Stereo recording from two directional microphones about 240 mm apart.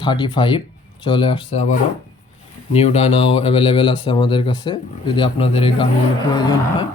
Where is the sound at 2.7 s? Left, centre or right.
Left.